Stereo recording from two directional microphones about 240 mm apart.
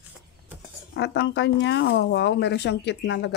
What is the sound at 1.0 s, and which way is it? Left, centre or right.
Speech, left.